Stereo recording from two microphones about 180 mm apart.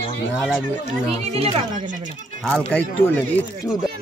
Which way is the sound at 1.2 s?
35° right (ahead or behind).